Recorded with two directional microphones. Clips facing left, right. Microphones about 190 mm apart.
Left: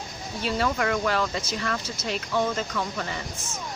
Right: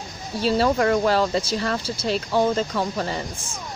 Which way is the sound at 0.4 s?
30° right (ahead or behind).